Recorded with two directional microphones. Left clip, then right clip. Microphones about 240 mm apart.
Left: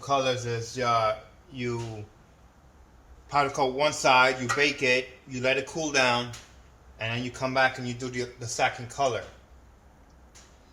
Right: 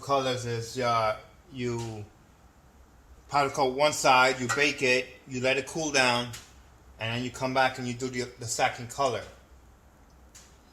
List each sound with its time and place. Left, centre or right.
0.0 s speech: centre
3.2 s speech: right